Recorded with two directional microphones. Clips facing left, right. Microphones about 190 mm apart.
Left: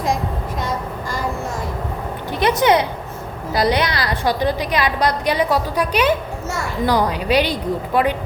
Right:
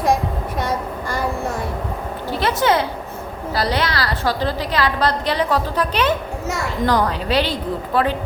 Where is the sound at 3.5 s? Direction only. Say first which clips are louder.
Left 3 dB; 20° left (ahead or behind).